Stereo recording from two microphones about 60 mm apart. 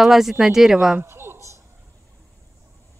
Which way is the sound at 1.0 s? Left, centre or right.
Right.